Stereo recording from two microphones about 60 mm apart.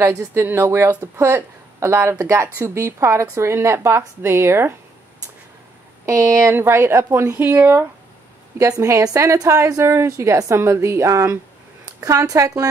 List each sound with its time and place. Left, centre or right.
0.3 s a woman's voice: right
0.7 s a woman's voice: right
6.0 s speech: right
6.5 s a woman's voice: right
8.5 s speech: right